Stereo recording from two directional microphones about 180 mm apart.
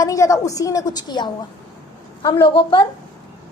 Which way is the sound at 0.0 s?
20° left (ahead or behind).